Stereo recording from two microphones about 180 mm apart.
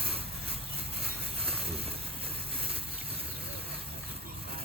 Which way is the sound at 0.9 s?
60° right (ahead or behind).